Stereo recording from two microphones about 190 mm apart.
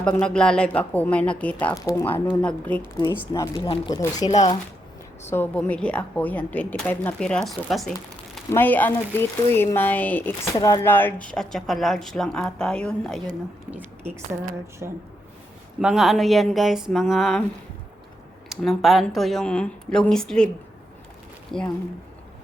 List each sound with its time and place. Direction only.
0.0 s speech: 5° left (ahead or behind); by 4.3 s 20° left (ahead or behind)
4.3 s speech: 35° left (ahead or behind)
5.2 s speech: 10° left (ahead or behind)
13.7 s a woman's voice: 10° right (ahead or behind)
15.8 s speech: 5° right (ahead or behind)
18.4 s speech: centre (ahead or behind)
21.5 s speech: 5° left (ahead or behind)